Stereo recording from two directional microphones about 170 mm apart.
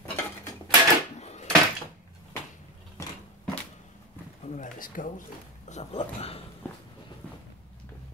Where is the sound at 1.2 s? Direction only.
40° left (ahead or behind).